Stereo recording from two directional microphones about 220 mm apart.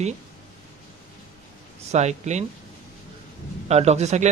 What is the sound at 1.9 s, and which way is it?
Speech, 30° right (ahead or behind).